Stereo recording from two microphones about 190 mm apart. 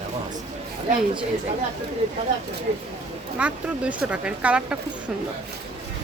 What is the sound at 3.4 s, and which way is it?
Speech, 5° right (ahead or behind).